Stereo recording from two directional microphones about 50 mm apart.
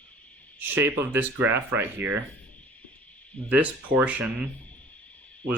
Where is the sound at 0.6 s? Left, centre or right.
Right.